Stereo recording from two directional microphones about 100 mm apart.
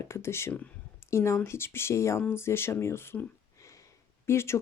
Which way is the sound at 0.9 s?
25° left (ahead or behind).